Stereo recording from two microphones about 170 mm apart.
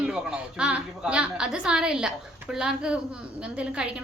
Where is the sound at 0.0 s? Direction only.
5° right (ahead or behind).